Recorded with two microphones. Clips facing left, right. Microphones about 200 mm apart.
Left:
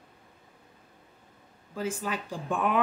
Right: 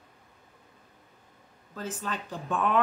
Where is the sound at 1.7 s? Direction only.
10° left (ahead or behind).